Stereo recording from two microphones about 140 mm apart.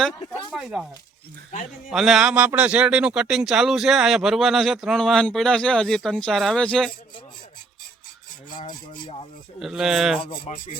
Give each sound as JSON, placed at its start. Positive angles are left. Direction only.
{"t": 0.5, "sound": "speech", "side_deg": -5}
{"t": 1.9, "sound": "speech", "side_deg": -5}
{"t": 8.4, "sound": "rub", "side_deg": 35}
{"t": 9.6, "sound": "speech", "side_deg": -5}
{"t": 10.2, "sound": "rub", "side_deg": 35}